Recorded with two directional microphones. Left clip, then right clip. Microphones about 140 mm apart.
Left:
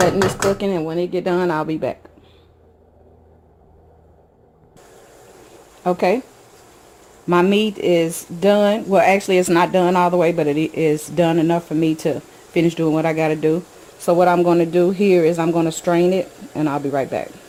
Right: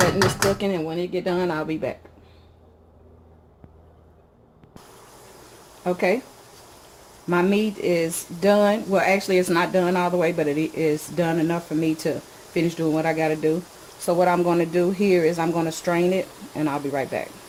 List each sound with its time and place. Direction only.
0.6 s speech: 45° left (ahead or behind)
5.8 s speech: 65° left (ahead or behind)
7.3 s speech: 60° left (ahead or behind)
8.4 s speech: 50° left (ahead or behind)
12.6 s speech: 50° left (ahead or behind)
14.0 s speech: 45° left (ahead or behind)
14.4 s a man's voice: 70° left (ahead or behind)
14.9 s speech: centre (ahead or behind)
15.2 s speech: 55° left (ahead or behind)